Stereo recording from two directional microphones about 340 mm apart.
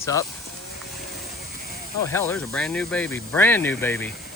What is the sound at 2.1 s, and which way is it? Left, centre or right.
Speech, centre.